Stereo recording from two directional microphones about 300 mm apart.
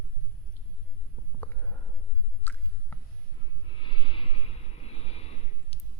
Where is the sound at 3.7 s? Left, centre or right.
Centre.